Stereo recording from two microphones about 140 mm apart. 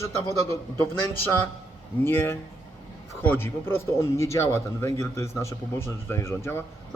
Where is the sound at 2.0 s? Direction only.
15° left (ahead or behind).